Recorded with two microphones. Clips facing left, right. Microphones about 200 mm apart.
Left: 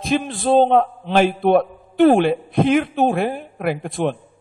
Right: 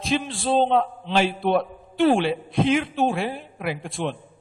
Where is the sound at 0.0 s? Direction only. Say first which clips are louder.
Left 4 dB; 50° left (ahead or behind).